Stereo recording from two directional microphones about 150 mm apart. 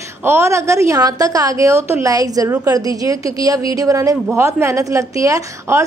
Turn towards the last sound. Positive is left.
turn(degrees=-20)  # may be behind; listen again after turning